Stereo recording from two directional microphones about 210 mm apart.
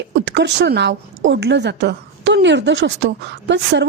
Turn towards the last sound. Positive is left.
turn(degrees=-55)  # may be behind; listen again after turning